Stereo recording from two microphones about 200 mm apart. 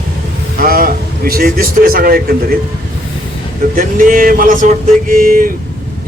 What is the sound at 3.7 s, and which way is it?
Speech, 45° right (ahead or behind).